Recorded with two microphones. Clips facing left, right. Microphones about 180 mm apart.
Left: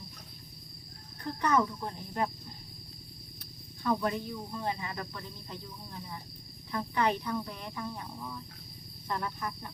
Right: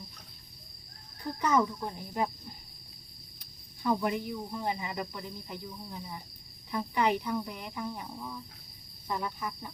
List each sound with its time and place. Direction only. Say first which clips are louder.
1.2 s cricket: right 1 dB; 10° right (ahead or behind)
3.8 s cricket: right 1 dB; 15° right (ahead or behind)